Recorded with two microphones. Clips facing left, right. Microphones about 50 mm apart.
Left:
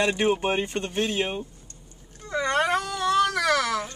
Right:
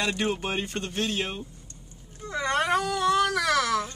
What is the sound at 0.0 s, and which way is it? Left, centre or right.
Speech, left.